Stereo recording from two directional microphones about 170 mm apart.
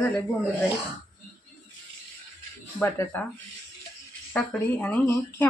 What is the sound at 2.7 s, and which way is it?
Speech, 15° left (ahead or behind).